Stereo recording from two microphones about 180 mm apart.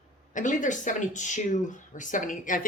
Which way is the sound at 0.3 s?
45° left (ahead or behind).